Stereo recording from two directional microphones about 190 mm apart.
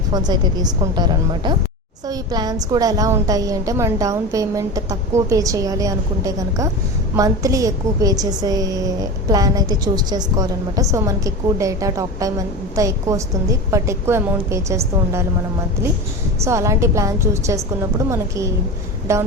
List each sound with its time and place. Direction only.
0.1 s a woman's voice: 20° right (ahead or behind)
16.4 s a woman's voice: 15° right (ahead or behind)